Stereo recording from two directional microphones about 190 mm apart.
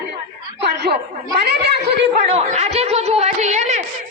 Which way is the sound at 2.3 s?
35° right (ahead or behind).